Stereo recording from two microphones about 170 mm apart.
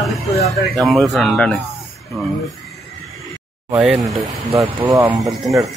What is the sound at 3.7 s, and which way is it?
Speech, 10° right (ahead or behind).